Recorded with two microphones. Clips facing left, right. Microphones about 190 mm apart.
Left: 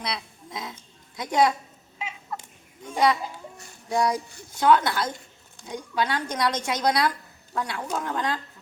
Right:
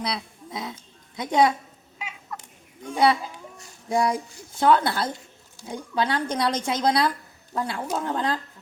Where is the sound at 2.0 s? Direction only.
25° left (ahead or behind).